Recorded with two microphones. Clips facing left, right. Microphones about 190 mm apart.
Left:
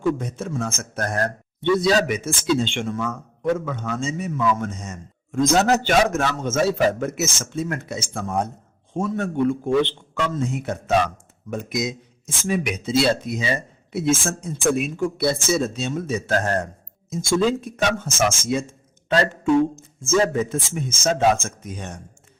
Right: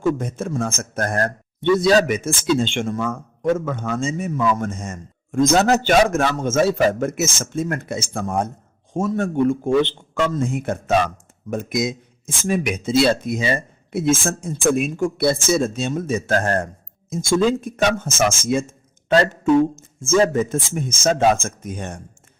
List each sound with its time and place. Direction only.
0.0 s speech: 50° right (ahead or behind)
19.7 s speech: 45° right (ahead or behind)